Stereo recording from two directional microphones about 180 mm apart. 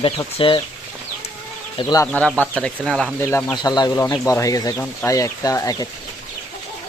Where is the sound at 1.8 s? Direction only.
20° left (ahead or behind).